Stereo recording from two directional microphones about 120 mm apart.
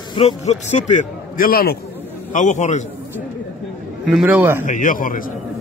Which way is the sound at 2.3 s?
90° left.